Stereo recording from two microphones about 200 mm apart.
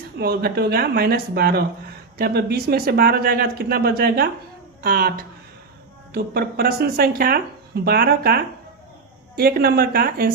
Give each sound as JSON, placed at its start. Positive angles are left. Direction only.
{"t": 0.2, "sound": "speech", "side_deg": -50}